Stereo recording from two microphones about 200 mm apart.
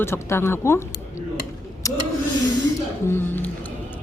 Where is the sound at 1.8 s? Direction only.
15° left (ahead or behind).